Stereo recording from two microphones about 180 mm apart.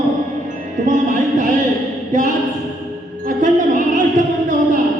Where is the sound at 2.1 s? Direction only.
45° right (ahead or behind).